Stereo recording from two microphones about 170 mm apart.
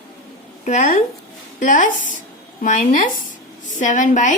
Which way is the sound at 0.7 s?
50° left (ahead or behind).